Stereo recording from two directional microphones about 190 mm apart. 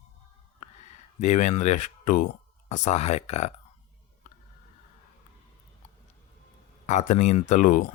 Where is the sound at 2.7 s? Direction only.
40° left (ahead or behind).